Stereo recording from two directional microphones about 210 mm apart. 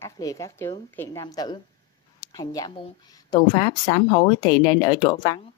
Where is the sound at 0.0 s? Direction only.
15° left (ahead or behind).